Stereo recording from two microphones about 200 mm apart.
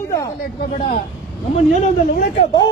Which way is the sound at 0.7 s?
35° left (ahead or behind).